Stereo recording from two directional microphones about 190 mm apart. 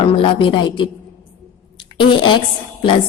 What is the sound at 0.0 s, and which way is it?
Speech, 25° left (ahead or behind).